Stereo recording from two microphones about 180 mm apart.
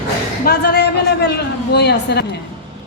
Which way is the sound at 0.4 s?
60° left (ahead or behind).